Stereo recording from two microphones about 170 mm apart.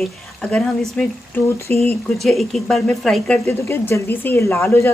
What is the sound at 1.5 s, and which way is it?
Speech, 15° left (ahead or behind).